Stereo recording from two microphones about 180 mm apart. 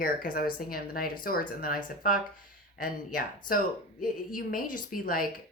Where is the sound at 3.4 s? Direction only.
50° left (ahead or behind).